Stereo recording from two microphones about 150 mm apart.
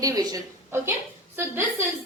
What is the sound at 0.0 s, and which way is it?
Speech, 25° right (ahead or behind).